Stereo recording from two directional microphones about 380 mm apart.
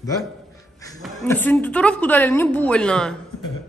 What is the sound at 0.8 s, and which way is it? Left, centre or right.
A man's voice, centre.